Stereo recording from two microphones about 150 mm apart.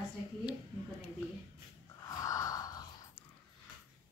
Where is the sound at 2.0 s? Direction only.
20° left (ahead or behind).